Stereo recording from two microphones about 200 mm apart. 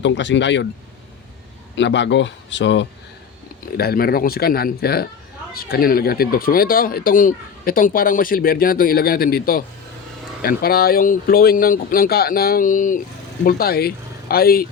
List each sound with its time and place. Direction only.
0.0 s speech: 65° left (ahead or behind)
1.7 s speech: 65° left (ahead or behind)
3.8 s speech: 50° left (ahead or behind)